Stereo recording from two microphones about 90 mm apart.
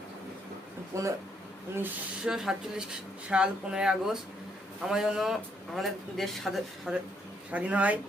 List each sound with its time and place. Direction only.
0.9 s speech: 35° right (ahead or behind)
2.2 s speech: 5° right (ahead or behind)
7.5 s speech: 15° right (ahead or behind)